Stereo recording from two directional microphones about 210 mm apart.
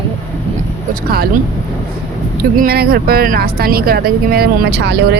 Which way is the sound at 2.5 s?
45° right (ahead or behind).